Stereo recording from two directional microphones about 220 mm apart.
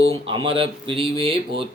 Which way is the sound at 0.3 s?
25° right (ahead or behind).